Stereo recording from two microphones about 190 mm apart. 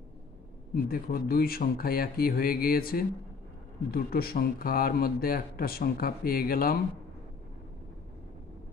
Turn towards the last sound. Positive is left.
turn(degrees=50)  # may be behind; listen again after turning